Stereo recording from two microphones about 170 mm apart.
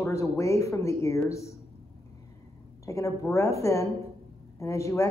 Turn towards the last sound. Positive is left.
turn(degrees=15)  # may be behind; listen again after turning